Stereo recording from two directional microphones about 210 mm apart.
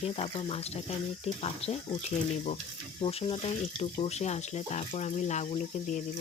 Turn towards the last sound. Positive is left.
turn(degrees=35)  # may be behind; listen again after turning